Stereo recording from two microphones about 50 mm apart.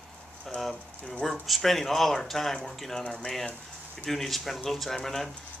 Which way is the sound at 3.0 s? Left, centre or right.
Centre.